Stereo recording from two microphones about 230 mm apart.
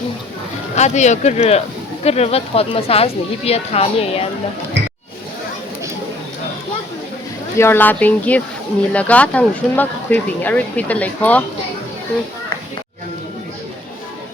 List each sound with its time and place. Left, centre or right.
0.8 s speech: left
7.6 s speech: centre